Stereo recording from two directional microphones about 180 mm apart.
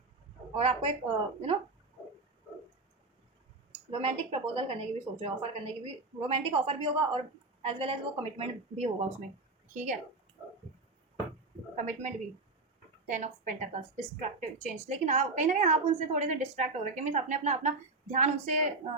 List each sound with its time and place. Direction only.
0.5 s a woman's voice: 35° right (ahead or behind)
4.0 s a woman's voice: 35° right (ahead or behind)
11.8 s a woman's voice: 45° right (ahead or behind)